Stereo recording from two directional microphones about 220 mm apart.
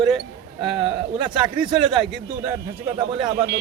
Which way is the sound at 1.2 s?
5° right (ahead or behind).